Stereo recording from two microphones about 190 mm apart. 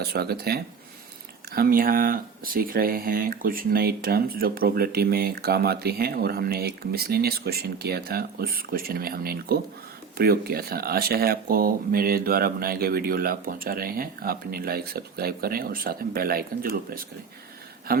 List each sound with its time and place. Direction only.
0.0 s speech: 55° right (ahead or behind)